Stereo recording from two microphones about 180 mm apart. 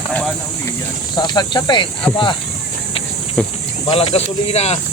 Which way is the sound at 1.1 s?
25° left (ahead or behind).